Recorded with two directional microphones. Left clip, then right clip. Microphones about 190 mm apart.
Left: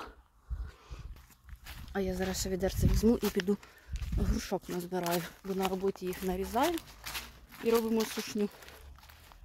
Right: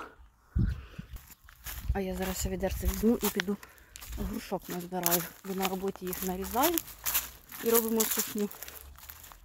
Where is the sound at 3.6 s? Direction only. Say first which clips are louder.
Right 3 dB; 60° right (ahead or behind).